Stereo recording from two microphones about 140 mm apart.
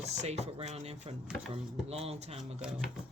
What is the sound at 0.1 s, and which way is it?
Speech, 50° right (ahead or behind).